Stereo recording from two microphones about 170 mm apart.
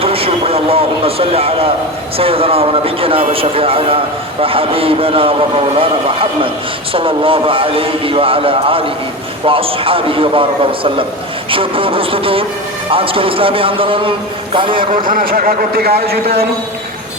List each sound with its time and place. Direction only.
0.0 s a man's voice: 35° right (ahead or behind)
15.0 s speech: 55° right (ahead or behind)